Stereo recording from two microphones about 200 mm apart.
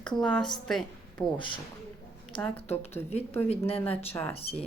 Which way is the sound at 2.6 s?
30° left (ahead or behind).